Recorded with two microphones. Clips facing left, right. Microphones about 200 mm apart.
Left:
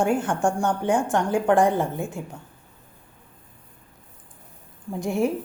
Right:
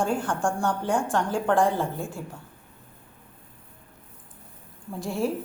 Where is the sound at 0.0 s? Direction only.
20° left (ahead or behind).